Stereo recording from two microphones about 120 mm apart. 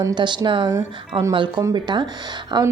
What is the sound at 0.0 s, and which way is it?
A woman's voice, 40° right (ahead or behind).